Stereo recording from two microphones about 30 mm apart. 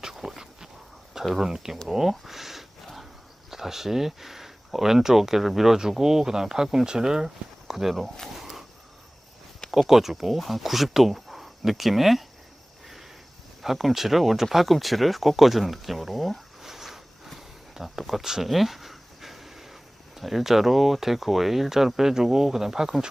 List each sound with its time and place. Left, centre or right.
0.0 s a sound: centre
1.5 s speech: right
1.9 s speech: centre
2.8 s battle cry: centre
3.5 s speech: centre
7.7 s speech: centre
8.0 s speech: centre
8.4 s a sound: centre
9.7 s speech: centre
13.6 s speech: centre
16.6 s a sound: centre
17.8 s speech: centre